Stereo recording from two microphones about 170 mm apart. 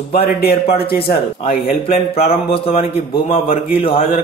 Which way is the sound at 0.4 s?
65° left (ahead or behind).